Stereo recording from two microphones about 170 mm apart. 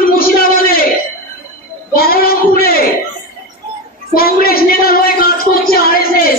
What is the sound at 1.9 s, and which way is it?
Speech, 60° left (ahead or behind).